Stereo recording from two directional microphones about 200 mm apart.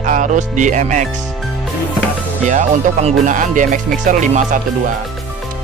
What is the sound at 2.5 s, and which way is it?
Speech, 40° right (ahead or behind).